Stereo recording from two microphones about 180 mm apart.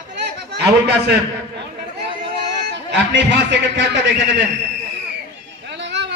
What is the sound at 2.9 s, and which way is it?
A man's voice, 80° right.